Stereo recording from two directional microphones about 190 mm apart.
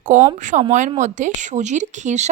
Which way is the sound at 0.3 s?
40° right (ahead or behind).